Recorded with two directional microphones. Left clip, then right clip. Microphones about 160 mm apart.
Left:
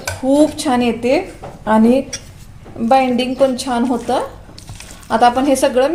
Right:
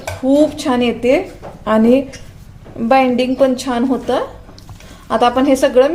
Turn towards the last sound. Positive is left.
turn(degrees=5)  # may be behind; listen again after turning